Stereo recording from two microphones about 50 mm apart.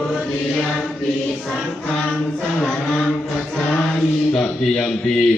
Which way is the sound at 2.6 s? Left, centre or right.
Centre.